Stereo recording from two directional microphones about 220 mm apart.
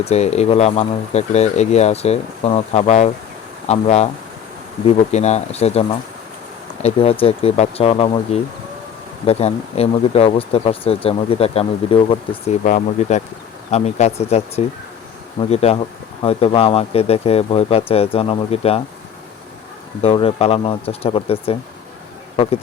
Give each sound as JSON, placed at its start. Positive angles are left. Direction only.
{"t": 0.0, "sound": "speech", "side_deg": 30}
{"t": 6.8, "sound": "speech", "side_deg": 25}
{"t": 20.0, "sound": "speech", "side_deg": 25}